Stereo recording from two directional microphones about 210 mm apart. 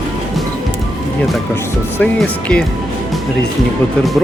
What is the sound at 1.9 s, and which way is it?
Speech, 5° left (ahead or behind).